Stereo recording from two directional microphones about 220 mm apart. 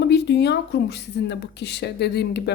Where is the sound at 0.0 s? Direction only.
50° left (ahead or behind).